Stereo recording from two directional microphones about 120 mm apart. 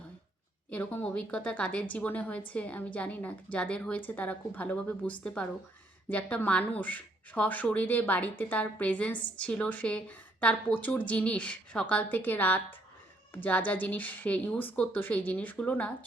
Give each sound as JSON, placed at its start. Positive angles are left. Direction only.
{"t": 0.7, "sound": "a woman's voice", "side_deg": 15}